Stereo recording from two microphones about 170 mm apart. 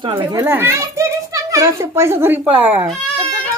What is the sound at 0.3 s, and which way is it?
A child's voice, 10° right (ahead or behind).